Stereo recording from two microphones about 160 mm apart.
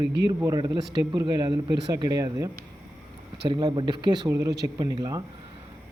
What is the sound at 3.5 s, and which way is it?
Speech, 30° right (ahead or behind).